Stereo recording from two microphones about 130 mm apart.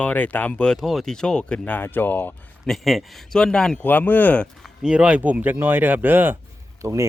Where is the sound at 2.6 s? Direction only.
Centre (ahead or behind).